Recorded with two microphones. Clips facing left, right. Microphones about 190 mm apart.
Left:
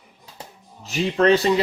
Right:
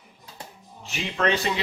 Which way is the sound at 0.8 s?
35° left (ahead or behind).